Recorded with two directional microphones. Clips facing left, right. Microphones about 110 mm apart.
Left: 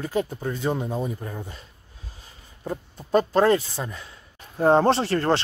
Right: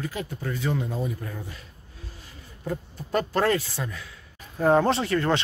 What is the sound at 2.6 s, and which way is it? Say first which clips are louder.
Speech: even; 25° left (ahead or behind).